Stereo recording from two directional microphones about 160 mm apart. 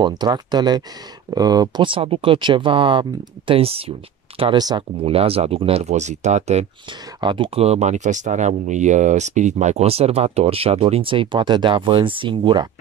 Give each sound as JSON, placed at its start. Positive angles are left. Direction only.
{"t": 0.0, "sound": "speech", "side_deg": -25}
{"t": 5.0, "sound": "speech", "side_deg": -40}
{"t": 7.2, "sound": "speech", "side_deg": -30}